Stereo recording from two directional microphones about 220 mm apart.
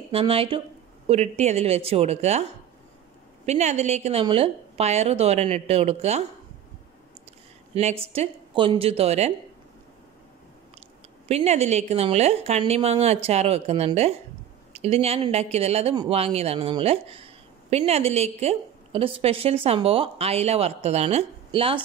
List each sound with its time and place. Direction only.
0.1 s speech: 25° right (ahead or behind)
7.7 s speech: 25° right (ahead or behind)
11.2 s speech: 30° right (ahead or behind)